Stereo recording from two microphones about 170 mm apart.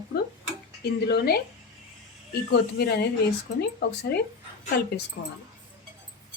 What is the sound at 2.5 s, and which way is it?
Speech, 75° left (ahead or behind).